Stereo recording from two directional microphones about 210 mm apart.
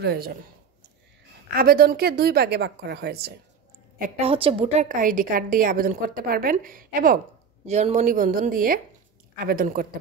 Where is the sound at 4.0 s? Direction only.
30° right (ahead or behind).